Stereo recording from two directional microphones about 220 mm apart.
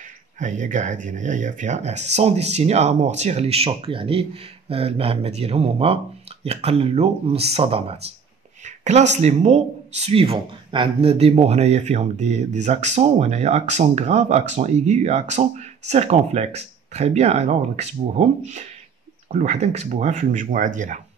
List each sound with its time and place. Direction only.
0.4 s speech: 35° right (ahead or behind)